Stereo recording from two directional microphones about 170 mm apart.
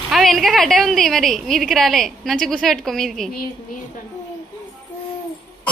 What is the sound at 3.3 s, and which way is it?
Speech, 55° left (ahead or behind).